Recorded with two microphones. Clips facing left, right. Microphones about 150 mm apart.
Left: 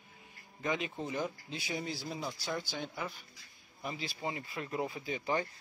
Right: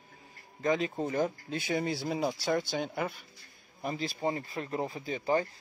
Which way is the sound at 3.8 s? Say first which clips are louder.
Right 6 dB; 40° right (ahead or behind).